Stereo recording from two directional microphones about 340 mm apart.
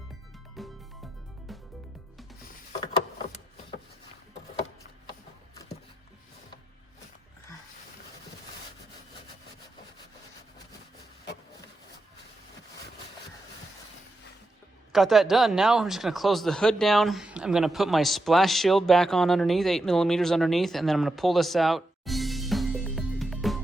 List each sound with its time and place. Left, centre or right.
0.6 s music: centre
14.9 s speech: centre